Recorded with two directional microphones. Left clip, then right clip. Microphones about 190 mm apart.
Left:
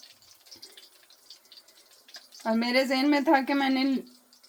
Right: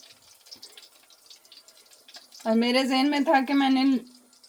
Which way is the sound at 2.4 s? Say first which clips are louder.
Right 2 dB; 25° left (ahead or behind).